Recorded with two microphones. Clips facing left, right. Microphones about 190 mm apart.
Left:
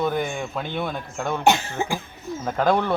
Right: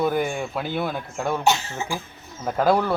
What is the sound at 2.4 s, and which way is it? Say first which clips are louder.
Speech: right 1 dB; 5° right (ahead or behind).